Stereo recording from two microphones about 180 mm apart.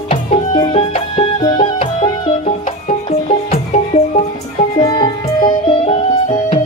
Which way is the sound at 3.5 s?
40° left (ahead or behind).